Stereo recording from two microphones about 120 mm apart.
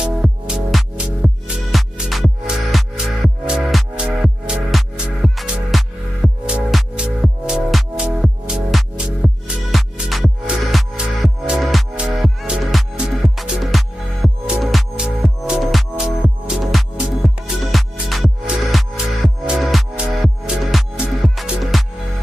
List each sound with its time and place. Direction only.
0.0 s music: 5° right (ahead or behind)